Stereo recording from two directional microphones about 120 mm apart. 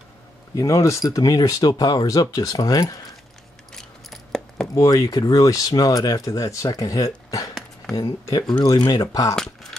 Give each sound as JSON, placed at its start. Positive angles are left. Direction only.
{"t": 0.6, "sound": "speech", "side_deg": 25}
{"t": 3.7, "sound": "a sound", "side_deg": 5}
{"t": 4.7, "sound": "speech", "side_deg": 30}
{"t": 9.3, "sound": "speech", "side_deg": 5}